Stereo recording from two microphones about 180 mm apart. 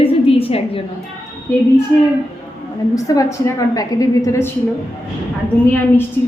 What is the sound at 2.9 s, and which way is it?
A woman's voice, 20° left (ahead or behind).